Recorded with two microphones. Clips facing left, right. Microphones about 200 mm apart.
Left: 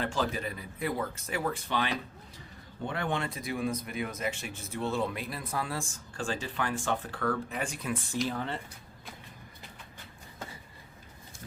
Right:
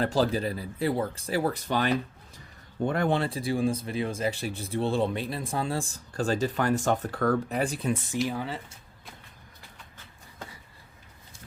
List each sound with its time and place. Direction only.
0.0 s speech: 35° right (ahead or behind)
8.3 s speech: 5° right (ahead or behind)